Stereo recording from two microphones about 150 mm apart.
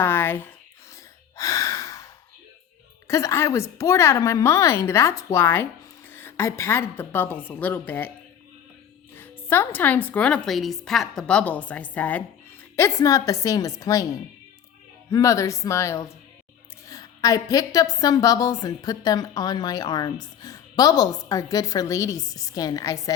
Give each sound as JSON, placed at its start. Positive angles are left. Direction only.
{"t": 0.0, "sound": "a sound", "side_deg": 15}
{"t": 1.4, "sound": "gasp", "side_deg": 20}
{"t": 3.1, "sound": "a woman's voice", "side_deg": 20}
{"t": 9.1, "sound": "a woman's voice", "side_deg": 15}
{"t": 15.1, "sound": "a woman's voice", "side_deg": 20}